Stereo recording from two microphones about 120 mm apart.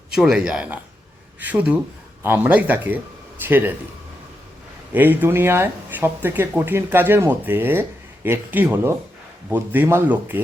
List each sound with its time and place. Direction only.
0.1 s speech: 5° right (ahead or behind)
4.9 s speech: 15° right (ahead or behind)